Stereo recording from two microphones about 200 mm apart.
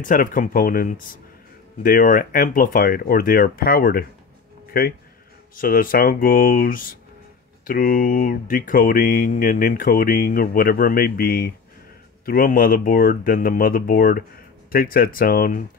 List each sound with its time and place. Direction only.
0.0 s speech: 45° left (ahead or behind)